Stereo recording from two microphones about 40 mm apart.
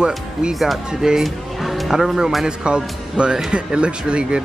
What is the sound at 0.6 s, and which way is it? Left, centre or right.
Speech, centre.